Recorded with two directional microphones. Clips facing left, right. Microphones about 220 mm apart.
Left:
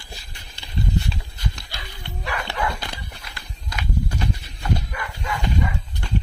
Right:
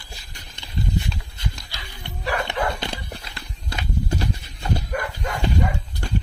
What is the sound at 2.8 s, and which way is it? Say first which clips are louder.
Horse: right 5 dB; 25° right (ahead or behind).